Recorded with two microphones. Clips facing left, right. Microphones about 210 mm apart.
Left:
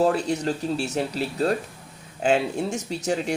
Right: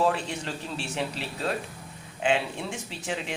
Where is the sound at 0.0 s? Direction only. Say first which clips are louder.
Left 5 dB; 40° left (ahead or behind).